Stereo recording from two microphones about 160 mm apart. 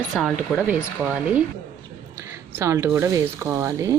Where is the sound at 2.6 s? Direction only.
15° right (ahead or behind).